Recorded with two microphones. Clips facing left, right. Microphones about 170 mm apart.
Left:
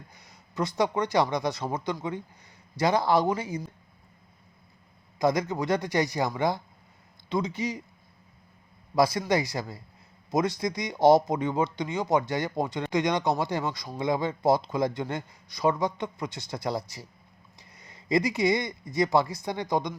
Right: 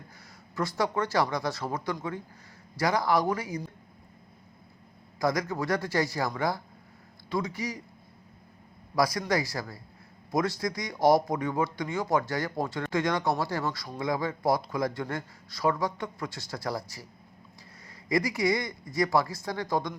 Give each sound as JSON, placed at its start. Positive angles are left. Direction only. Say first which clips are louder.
{"t": 0.5, "sound": "speech", "louder": "left 2 dB", "side_deg": 20}
{"t": 5.2, "sound": "speech", "louder": "left 3 dB", "side_deg": 20}
{"t": 9.0, "sound": "speech", "louder": "left 3 dB", "side_deg": 25}